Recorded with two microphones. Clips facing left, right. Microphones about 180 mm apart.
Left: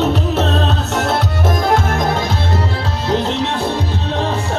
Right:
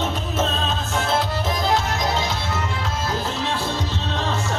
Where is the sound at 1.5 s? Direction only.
50° left (ahead or behind).